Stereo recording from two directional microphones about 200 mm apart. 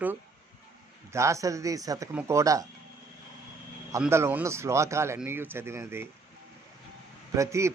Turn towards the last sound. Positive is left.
turn(degrees=-15)  # may be behind; listen again after turning